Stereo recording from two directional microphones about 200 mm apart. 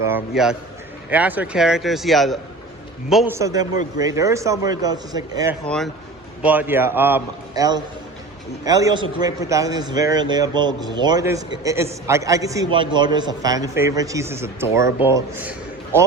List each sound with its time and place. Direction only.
0.1 s a man's voice: 5° right (ahead or behind)
3.3 s a man's voice: 15° right (ahead or behind)
5.6 s a man's voice: 5° left (ahead or behind)
6.4 s a man's voice: 10° right (ahead or behind)